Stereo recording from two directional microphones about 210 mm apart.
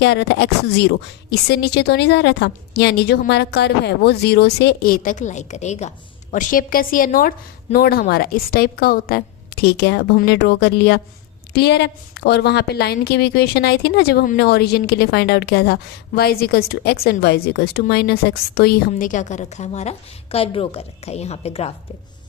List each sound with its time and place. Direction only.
0.0 s a woman's voice: 55° left (ahead or behind); by 21.7 s 30° left (ahead or behind)